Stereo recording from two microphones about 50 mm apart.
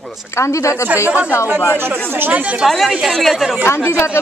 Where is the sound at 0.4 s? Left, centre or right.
Left.